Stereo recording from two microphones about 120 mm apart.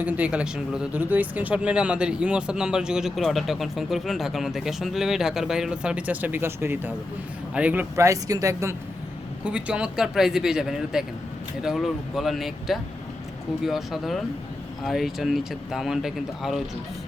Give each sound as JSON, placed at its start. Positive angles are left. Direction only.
{"t": 0.0, "sound": "speech", "side_deg": -10}
{"t": 9.4, "sound": "speech", "side_deg": -10}